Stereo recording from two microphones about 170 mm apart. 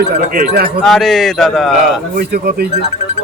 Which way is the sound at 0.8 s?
Centre (ahead or behind).